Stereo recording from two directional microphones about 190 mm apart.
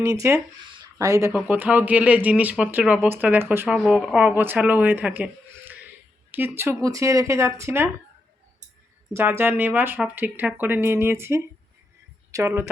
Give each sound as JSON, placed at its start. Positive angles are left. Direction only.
{"t": 0.0, "sound": "speech", "side_deg": -15}
{"t": 9.1, "sound": "speech", "side_deg": -10}